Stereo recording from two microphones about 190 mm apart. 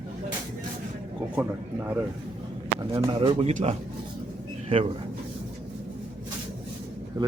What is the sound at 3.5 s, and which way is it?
Speech, 40° right (ahead or behind).